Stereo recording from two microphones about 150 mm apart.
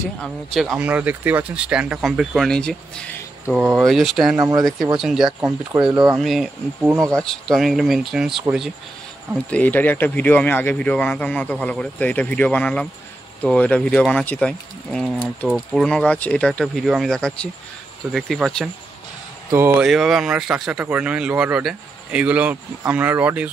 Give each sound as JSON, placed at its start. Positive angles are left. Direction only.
{"t": 0.2, "sound": "speech", "side_deg": 0}
{"t": 0.7, "sound": "speech", "side_deg": -10}
{"t": 4.4, "sound": "speech", "side_deg": -25}
{"t": 4.9, "sound": "speech", "side_deg": 0}
{"t": 5.4, "sound": "speech", "side_deg": -20}
{"t": 6.1, "sound": "speech", "side_deg": 0}
{"t": 9.5, "sound": "speech", "side_deg": 10}
{"t": 19.8, "sound": "speech", "side_deg": 0}